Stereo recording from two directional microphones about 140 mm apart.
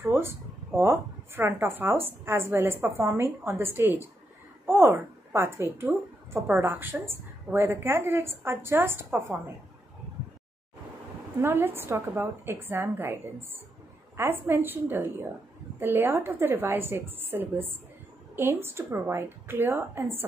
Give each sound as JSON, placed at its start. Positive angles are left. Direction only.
{"t": 0.0, "sound": "a woman's voice", "side_deg": -15}
{"t": 11.3, "sound": "a woman's voice", "side_deg": -15}